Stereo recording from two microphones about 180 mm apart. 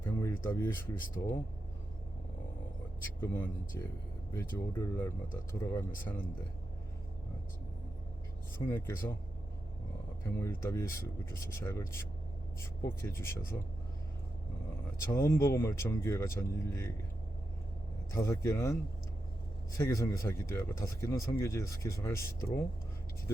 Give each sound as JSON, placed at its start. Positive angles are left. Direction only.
{"t": 0.0, "sound": "speech", "side_deg": 15}
{"t": 3.0, "sound": "speech", "side_deg": 15}
{"t": 8.5, "sound": "speech", "side_deg": 15}
{"t": 10.2, "sound": "speech", "side_deg": 15}
{"t": 15.1, "sound": "speech", "side_deg": 15}
{"t": 18.1, "sound": "speech", "side_deg": 15}